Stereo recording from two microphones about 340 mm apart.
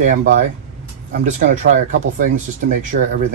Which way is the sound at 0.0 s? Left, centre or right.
Right.